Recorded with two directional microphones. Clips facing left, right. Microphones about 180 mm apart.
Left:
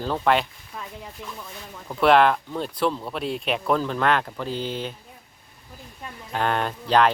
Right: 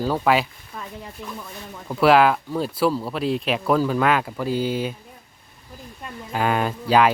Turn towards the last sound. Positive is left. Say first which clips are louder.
# right 2 dB
turn(degrees=-5)  # may be behind; listen again after turning